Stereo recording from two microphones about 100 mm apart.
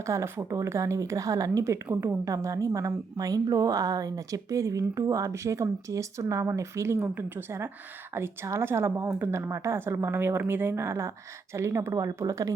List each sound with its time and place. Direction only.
0.0 s a woman's voice: 30° right (ahead or behind)